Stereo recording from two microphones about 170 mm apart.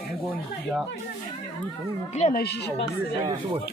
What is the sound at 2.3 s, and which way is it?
Speech, 75° left (ahead or behind).